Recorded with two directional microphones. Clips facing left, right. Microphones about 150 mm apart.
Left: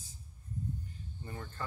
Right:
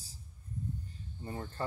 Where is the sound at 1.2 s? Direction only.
30° right (ahead or behind).